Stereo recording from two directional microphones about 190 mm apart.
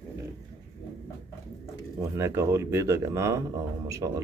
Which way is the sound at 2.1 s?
15° right (ahead or behind).